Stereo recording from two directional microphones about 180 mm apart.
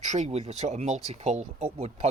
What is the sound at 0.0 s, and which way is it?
Speech, 40° right (ahead or behind).